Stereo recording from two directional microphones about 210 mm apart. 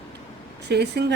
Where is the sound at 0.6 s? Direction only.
55° right (ahead or behind).